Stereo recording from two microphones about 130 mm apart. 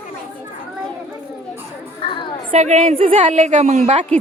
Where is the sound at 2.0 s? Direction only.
40° left (ahead or behind).